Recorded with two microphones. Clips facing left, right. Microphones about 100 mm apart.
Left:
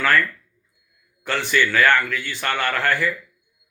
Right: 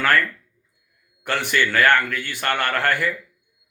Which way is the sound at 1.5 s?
50° right (ahead or behind).